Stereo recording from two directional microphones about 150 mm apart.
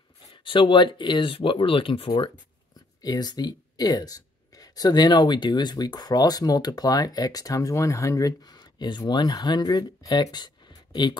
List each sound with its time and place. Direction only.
0.5 s speech: 35° left (ahead or behind)
3.0 s speech: 25° left (ahead or behind)